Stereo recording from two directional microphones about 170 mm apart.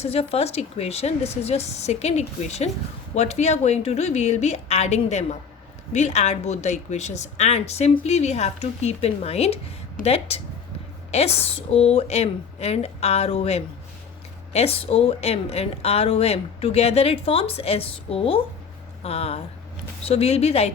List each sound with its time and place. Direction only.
0.0 s a woman's voice: 35° left (ahead or behind)